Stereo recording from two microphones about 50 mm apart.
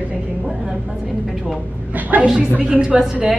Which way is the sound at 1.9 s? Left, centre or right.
Right.